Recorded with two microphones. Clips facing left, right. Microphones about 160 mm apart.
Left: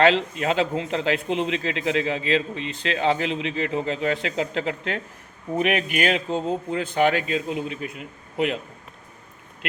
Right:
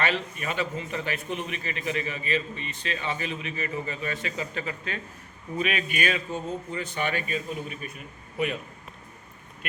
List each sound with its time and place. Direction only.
0.0 s a man's voice: 90° left